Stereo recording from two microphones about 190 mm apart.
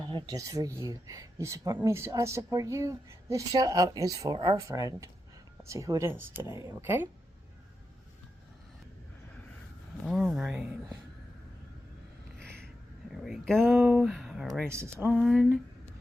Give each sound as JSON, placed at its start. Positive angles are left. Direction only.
{"t": 0.1, "sound": "speech", "side_deg": -20}
{"t": 10.1, "sound": "speech", "side_deg": 0}
{"t": 12.4, "sound": "a sound", "side_deg": 5}
{"t": 13.1, "sound": "speech", "side_deg": 0}
{"t": 14.7, "sound": "speech", "side_deg": -15}
{"t": 15.1, "sound": "speech", "side_deg": 0}